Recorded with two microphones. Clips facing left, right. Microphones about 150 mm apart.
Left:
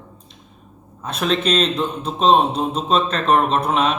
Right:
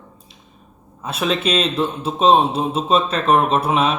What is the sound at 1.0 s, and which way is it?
A man's voice, 5° right (ahead or behind).